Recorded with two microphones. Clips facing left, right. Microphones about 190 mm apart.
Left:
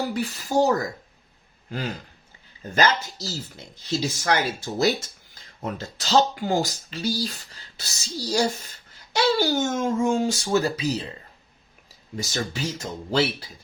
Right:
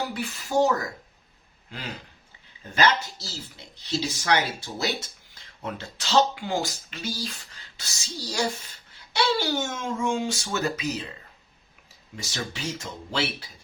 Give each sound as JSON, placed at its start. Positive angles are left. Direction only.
{"t": 0.1, "sound": "speech", "side_deg": 40}
{"t": 2.7, "sound": "speech", "side_deg": 40}
{"t": 12.1, "sound": "speech", "side_deg": 40}